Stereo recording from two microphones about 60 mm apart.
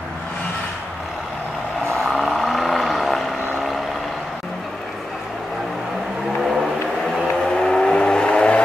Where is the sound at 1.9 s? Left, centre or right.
Centre.